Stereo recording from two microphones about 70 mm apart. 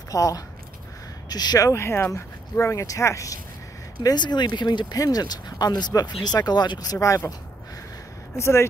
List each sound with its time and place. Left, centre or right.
0.1 s speech: left
1.3 s speech: left
1.7 s speech: left
4.0 s speech: left
6.2 s speech: left
8.4 s speech: left